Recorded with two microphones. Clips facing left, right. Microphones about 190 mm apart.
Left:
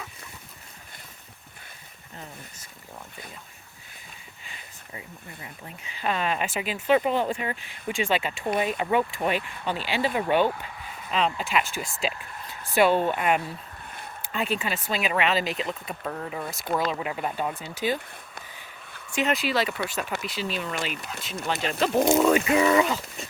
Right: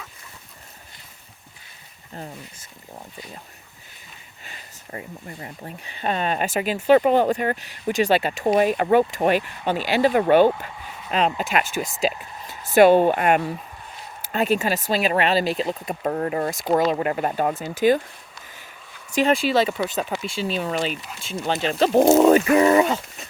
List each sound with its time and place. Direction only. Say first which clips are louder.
4.9 s speech: right 8 dB; 55° right (ahead or behind)
5.6 s speech: right 2 dB; 35° right (ahead or behind); by 13.4 s 55° right (ahead or behind)
14.2 s speech: right 7 dB; 40° right (ahead or behind)
19.1 s speech: right 6 dB; 30° right (ahead or behind)
20.6 s speech: right 6 dB; 40° right (ahead or behind)